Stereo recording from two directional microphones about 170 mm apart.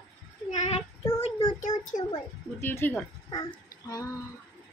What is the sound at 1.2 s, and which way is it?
Child singing, 35° left (ahead or behind).